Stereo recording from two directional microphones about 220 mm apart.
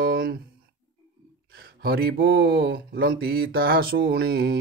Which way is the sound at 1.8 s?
45° right (ahead or behind).